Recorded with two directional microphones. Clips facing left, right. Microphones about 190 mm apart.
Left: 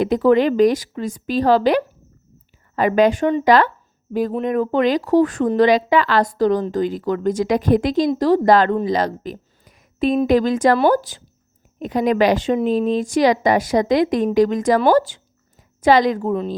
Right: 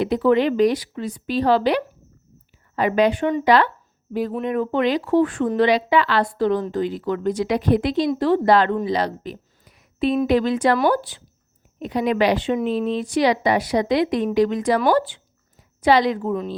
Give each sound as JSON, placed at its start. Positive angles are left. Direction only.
{"t": 0.0, "sound": "a woman's voice", "side_deg": 45}